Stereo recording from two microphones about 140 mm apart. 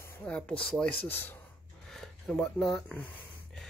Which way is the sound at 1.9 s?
Centre (ahead or behind).